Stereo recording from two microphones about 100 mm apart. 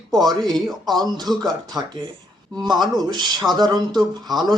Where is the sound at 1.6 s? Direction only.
45° right (ahead or behind).